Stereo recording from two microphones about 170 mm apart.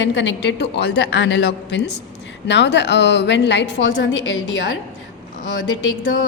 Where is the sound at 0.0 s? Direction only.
90° left.